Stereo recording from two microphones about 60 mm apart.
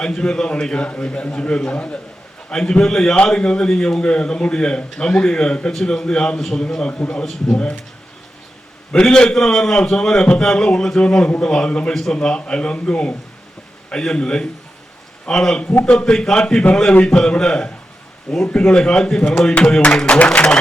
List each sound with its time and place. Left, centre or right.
0.0 s a man's voice: centre
8.9 s a man's voice: centre